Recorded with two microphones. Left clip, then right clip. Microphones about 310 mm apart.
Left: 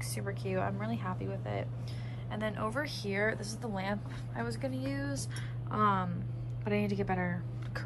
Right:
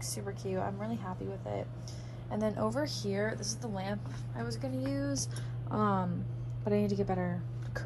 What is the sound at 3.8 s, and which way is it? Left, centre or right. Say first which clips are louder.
Speech: left 2 dB; centre.